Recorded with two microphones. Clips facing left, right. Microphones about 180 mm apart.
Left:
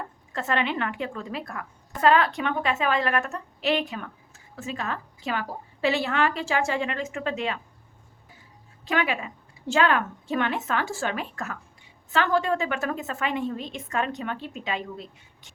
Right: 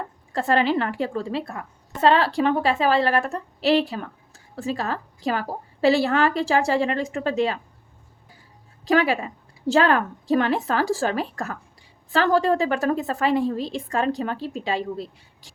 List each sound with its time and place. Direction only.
0.3 s a woman's voice: 35° right (ahead or behind)
8.8 s a woman's voice: 35° right (ahead or behind)